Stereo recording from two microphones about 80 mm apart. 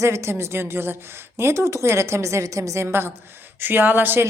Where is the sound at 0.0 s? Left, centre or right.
Right.